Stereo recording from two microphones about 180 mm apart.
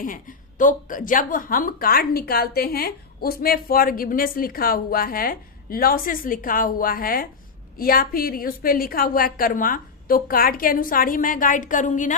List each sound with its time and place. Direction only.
0.0 s a woman's voice: 50° left (ahead or behind)